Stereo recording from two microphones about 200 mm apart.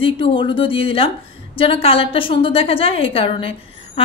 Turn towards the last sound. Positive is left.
turn(degrees=30)  # may be behind; listen again after turning